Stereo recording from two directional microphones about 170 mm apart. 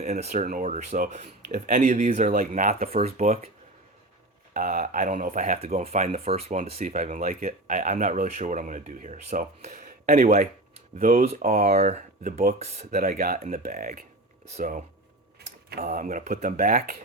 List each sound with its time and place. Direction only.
0.0 s speech: 40° right (ahead or behind)
1.5 s speech: 55° right (ahead or behind)
1.8 s speech: 40° right (ahead or behind)
4.5 s speech: 50° right (ahead or behind)
11.3 s speech: 40° right (ahead or behind)
12.5 s speech: 40° right (ahead or behind)
12.9 s speech: 60° right (ahead or behind)
15.4 s speech: 65° right (ahead or behind)